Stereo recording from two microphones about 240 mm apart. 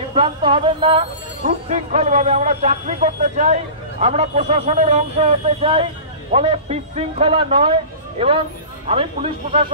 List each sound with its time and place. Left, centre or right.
0.1 s speech: right